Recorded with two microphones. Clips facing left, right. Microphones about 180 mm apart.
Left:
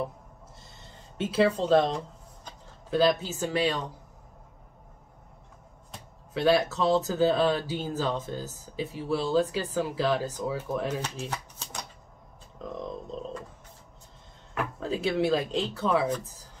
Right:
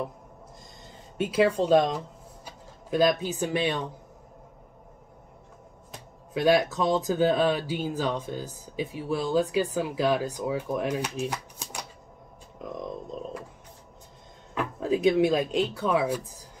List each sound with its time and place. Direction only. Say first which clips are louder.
1.1 s speech: right 1 dB; 15° right (ahead or behind)
2.0 s a sound: even; 10° right (ahead or behind)
6.3 s speech: right 1 dB; 15° right (ahead or behind)
14.5 s speech: right 4 dB; 15° right (ahead or behind)